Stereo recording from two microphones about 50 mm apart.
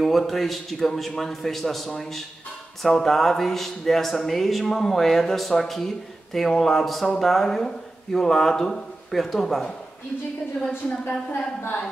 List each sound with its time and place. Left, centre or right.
0.0 s speech: centre
11.1 s a woman's voice: left